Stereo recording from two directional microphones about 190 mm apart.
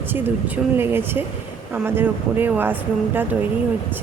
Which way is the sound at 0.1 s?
10° right (ahead or behind).